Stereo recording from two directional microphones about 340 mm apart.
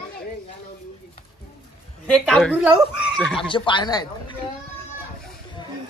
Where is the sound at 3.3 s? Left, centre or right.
Centre.